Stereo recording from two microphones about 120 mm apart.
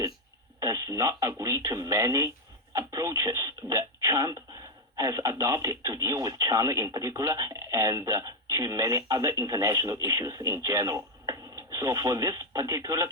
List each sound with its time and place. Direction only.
0.6 s speech: 30° right (ahead or behind)